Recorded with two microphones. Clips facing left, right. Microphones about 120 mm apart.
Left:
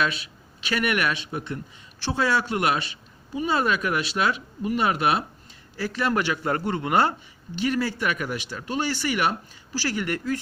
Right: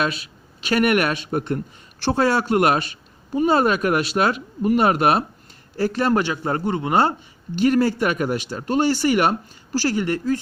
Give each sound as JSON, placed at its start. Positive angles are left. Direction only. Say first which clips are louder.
{"t": 0.0, "sound": "a man's voice", "louder": "right 2 dB", "side_deg": -40}
{"t": 7.6, "sound": "speech", "louder": "right 7 dB", "side_deg": -45}